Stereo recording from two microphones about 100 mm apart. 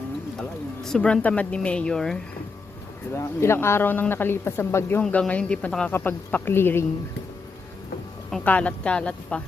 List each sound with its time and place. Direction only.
0.9 s speech: 10° left (ahead or behind)
3.2 s speech: 25° left (ahead or behind)
5.3 s speech: 15° left (ahead or behind)
8.4 s speech: 15° left (ahead or behind)